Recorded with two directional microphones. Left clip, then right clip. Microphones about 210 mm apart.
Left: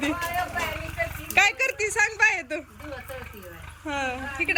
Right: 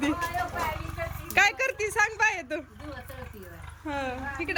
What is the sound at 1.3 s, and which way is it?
A woman's voice, 10° right (ahead or behind).